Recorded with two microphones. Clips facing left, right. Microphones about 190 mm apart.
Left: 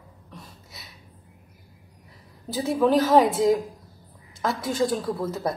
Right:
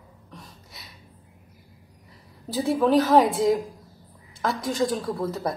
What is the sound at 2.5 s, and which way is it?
A woman's voice, centre (ahead or behind).